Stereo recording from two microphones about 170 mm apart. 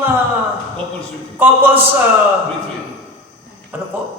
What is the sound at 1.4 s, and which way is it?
Speech, 10° right (ahead or behind).